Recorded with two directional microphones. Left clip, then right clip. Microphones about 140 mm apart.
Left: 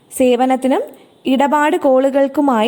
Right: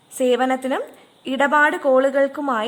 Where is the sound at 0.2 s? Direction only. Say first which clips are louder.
Left 5 dB; 25° left (ahead or behind).